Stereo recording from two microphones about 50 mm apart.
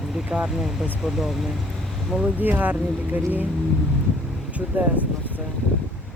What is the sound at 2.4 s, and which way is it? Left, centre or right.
Speech, right.